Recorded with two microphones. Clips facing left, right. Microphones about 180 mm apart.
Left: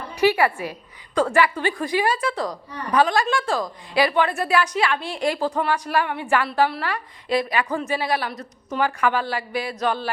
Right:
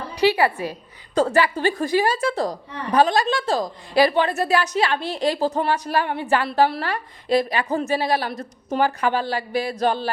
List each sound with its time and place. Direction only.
0.2 s a woman's voice: 35° right (ahead or behind)
2.3 s a woman's voice: 25° right (ahead or behind)
3.9 s a woman's voice: 40° right (ahead or behind)
7.8 s a woman's voice: 40° right (ahead or behind)
8.0 s a woman's voice: 25° right (ahead or behind)
9.7 s a woman's voice: 30° right (ahead or behind)